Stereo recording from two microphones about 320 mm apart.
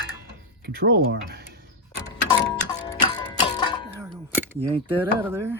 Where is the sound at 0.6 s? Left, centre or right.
Right.